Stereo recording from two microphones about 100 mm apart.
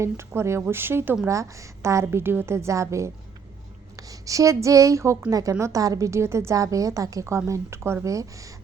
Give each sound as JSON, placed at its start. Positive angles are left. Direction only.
{"t": 0.0, "sound": "a woman's voice", "side_deg": -25}